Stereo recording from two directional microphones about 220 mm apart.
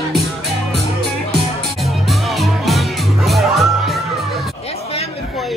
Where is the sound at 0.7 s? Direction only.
50° right (ahead or behind).